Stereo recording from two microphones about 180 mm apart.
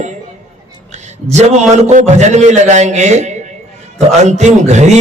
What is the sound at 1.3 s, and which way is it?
A man's voice, 40° right (ahead or behind).